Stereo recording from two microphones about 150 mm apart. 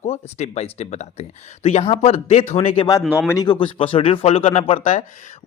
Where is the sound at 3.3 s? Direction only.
25° left (ahead or behind).